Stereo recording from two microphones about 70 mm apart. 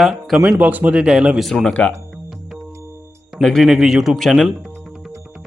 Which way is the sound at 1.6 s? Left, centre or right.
Centre.